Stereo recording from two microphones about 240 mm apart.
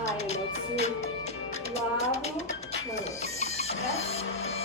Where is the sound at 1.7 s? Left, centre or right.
Right.